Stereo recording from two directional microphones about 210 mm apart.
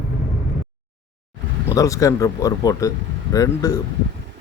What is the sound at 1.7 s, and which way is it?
Speech, 15° left (ahead or behind).